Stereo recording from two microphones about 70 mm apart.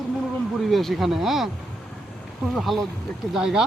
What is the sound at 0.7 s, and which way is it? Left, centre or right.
Speech, centre.